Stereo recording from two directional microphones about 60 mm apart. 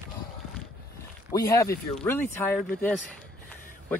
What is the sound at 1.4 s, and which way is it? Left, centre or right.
Speech, left.